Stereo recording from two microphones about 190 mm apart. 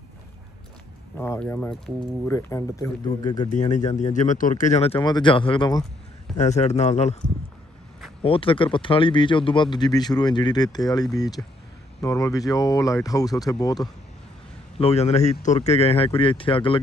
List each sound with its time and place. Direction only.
1.1 s speech: 10° left (ahead or behind)
3.4 s speech: 40° left (ahead or behind); by 5.9 s 20° left (ahead or behind)
6.3 s speech: 35° left (ahead or behind)
8.2 s speech: 30° left (ahead or behind)
14.8 s speech: 35° left (ahead or behind)